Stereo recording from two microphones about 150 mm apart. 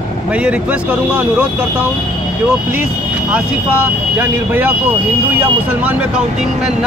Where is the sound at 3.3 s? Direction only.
10° right (ahead or behind).